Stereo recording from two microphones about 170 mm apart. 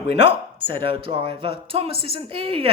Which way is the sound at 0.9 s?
30° right (ahead or behind).